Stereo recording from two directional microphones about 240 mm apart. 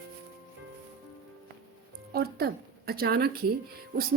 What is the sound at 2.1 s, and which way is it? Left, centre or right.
Speech, right.